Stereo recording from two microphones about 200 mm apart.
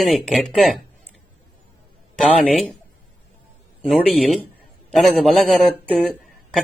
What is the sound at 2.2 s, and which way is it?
Speech, centre (ahead or behind).